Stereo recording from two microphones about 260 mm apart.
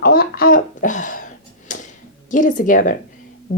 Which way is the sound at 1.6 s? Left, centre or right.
Left.